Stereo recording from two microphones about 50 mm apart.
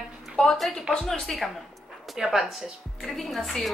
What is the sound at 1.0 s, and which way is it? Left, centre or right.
Speech, centre.